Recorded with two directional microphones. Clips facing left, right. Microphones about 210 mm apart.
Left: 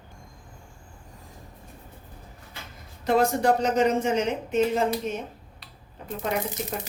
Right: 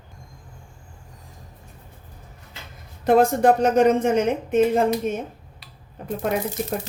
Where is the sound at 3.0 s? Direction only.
55° right (ahead or behind).